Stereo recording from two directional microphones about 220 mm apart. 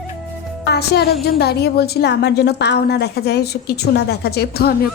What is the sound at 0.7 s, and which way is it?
Speech, 45° left (ahead or behind).